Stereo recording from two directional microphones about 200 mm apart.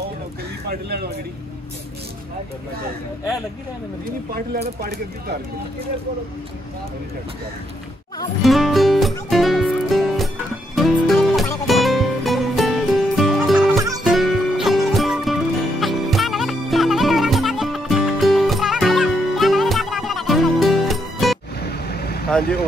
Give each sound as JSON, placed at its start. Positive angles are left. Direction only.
{"t": 0.7, "sound": "speech", "side_deg": -50}
{"t": 8.4, "sound": "music", "side_deg": 0}
{"t": 14.0, "sound": "music", "side_deg": 0}
{"t": 21.5, "sound": "vehicle", "side_deg": 50}
{"t": 22.4, "sound": "speech", "side_deg": 50}